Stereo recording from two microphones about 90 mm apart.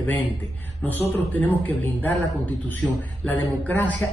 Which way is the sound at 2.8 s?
20° left (ahead or behind).